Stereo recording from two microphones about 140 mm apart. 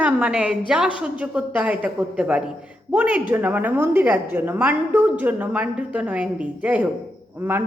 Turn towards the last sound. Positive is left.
turn(degrees=-15)  # may be behind; listen again after turning